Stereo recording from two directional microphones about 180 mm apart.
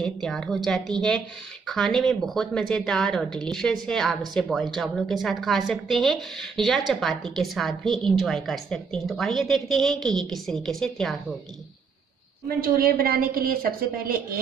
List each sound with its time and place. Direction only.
0.0 s a woman's voice: 5° left (ahead or behind)
12.4 s a woman's voice: 55° right (ahead or behind)